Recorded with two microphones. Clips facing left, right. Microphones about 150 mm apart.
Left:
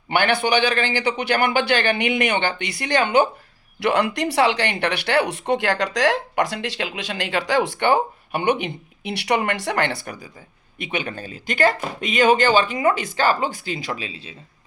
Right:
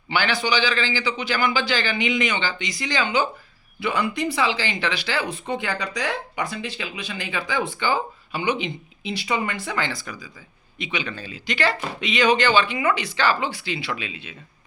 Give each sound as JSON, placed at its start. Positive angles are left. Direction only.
{"t": 0.1, "sound": "speech", "side_deg": 55}
{"t": 3.8, "sound": "speech", "side_deg": 80}